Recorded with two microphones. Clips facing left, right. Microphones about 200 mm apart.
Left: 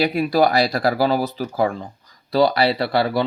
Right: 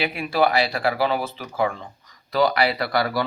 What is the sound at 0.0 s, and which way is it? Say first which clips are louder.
Speech: left 4 dB; 40° left (ahead or behind).